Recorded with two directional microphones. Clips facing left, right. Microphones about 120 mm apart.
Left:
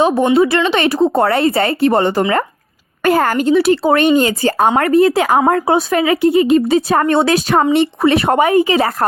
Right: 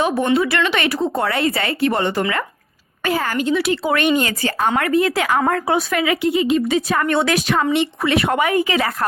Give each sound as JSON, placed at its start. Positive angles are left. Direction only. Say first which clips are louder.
{"t": 0.0, "sound": "a woman's voice", "louder": "left 6 dB", "side_deg": 25}
{"t": 3.0, "sound": "a woman's voice", "louder": "left 7 dB", "side_deg": 50}